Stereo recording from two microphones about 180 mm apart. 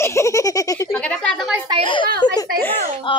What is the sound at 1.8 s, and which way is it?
Speech, 25° left (ahead or behind).